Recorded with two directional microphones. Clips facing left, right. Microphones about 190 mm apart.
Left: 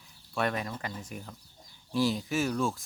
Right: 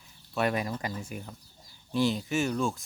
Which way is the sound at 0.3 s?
10° right (ahead or behind).